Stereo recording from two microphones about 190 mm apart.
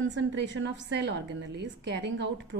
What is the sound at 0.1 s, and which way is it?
A woman's voice, 70° right (ahead or behind).